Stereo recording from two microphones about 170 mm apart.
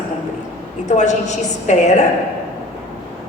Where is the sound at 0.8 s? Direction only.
45° left (ahead or behind).